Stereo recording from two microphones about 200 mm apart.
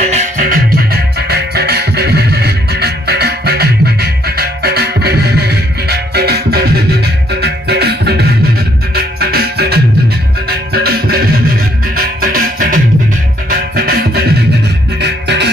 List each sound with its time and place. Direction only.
0.0 s music: 35° right (ahead or behind)
0.7 s music: 50° right (ahead or behind)